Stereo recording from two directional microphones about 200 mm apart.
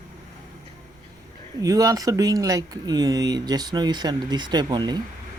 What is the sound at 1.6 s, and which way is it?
Speech, 15° right (ahead or behind).